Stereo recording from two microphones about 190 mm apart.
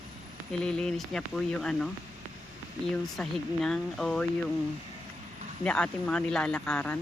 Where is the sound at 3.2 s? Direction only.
Centre (ahead or behind).